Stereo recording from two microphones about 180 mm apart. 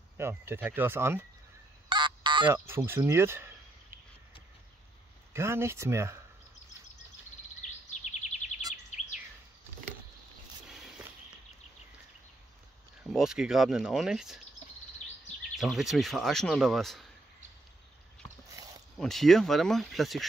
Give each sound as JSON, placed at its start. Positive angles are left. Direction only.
{"t": 0.2, "sound": "speech", "side_deg": -10}
{"t": 1.9, "sound": "a sound", "side_deg": -25}
{"t": 2.5, "sound": "speech", "side_deg": -10}
{"t": 5.3, "sound": "speech", "side_deg": -15}
{"t": 7.9, "sound": "bird vocalization", "side_deg": 40}
{"t": 8.9, "sound": "a sound", "side_deg": 40}
{"t": 10.7, "sound": "walk", "side_deg": 0}
{"t": 13.1, "sound": "speech", "side_deg": -5}
{"t": 15.5, "sound": "speech", "side_deg": 0}
{"t": 18.9, "sound": "speech", "side_deg": 0}